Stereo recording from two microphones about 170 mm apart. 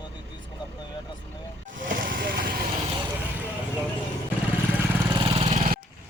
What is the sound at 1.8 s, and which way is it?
Vehicle, 55° right (ahead or behind).